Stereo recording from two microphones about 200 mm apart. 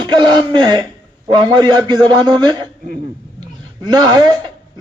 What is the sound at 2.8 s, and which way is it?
Speech, 40° right (ahead or behind).